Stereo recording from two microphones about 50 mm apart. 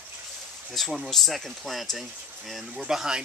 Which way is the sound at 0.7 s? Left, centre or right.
Centre.